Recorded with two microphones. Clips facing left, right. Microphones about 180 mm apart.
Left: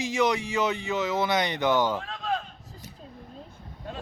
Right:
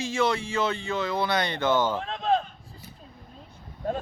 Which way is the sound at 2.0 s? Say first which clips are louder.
Right 6 dB; 25° right (ahead or behind).